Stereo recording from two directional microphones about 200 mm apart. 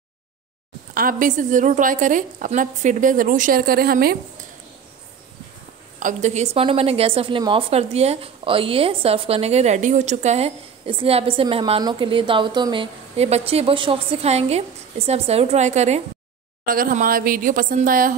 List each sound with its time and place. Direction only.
0.9 s speech: 40° right (ahead or behind)
5.9 s a woman's voice: 40° right (ahead or behind)
16.6 s a woman's voice: 45° right (ahead or behind)